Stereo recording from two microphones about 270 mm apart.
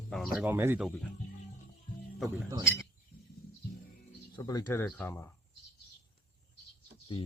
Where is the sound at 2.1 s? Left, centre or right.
Centre.